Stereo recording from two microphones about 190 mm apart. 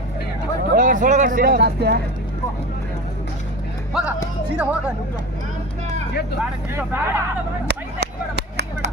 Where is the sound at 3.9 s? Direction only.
5° right (ahead or behind).